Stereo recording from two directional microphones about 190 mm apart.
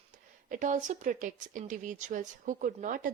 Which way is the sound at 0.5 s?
40° right (ahead or behind).